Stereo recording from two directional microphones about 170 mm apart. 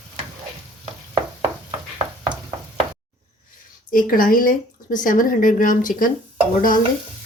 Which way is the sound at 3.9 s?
55° left (ahead or behind).